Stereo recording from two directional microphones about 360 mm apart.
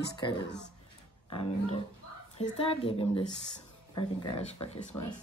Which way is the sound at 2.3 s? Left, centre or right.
Centre.